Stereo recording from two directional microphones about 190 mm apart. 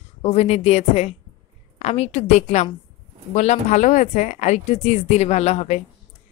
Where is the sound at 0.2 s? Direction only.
30° left (ahead or behind).